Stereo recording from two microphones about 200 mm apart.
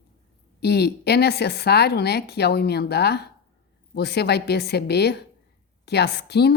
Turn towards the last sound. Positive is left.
turn(degrees=55)  # may be behind; listen again after turning